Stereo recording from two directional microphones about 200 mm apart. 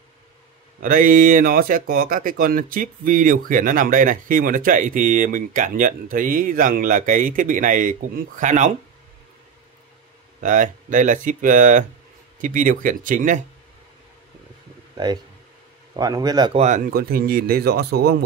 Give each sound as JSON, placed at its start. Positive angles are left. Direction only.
{"t": 0.8, "sound": "speech", "side_deg": -45}
{"t": 10.4, "sound": "speech", "side_deg": -40}
{"t": 16.0, "sound": "speech", "side_deg": -20}
{"t": 16.6, "sound": "speech", "side_deg": -45}